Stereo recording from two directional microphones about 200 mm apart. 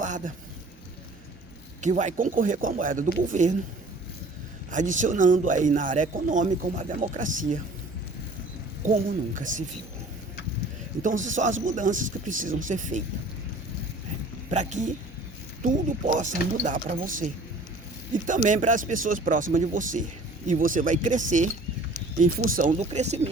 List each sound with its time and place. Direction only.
0.0 s a man's voice: 40° right (ahead or behind)
1.8 s speech: 35° right (ahead or behind)
4.7 s speech: 40° right (ahead or behind)
9.3 s speech: 40° right (ahead or behind)
11.0 s speech: 40° right (ahead or behind)
14.5 s speech: 35° right (ahead or behind)